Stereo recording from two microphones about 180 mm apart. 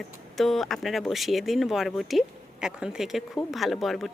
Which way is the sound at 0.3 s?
Centre (ahead or behind).